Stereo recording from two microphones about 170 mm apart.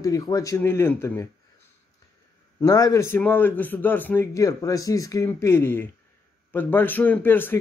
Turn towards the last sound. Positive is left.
turn(degrees=10)  # may be behind; listen again after turning